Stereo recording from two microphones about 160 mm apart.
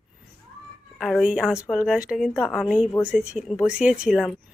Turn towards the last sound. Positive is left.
turn(degrees=-5)  # may be behind; listen again after turning